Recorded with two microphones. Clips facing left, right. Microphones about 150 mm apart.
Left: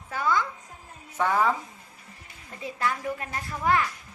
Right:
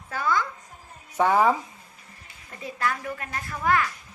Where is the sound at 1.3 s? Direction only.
20° right (ahead or behind).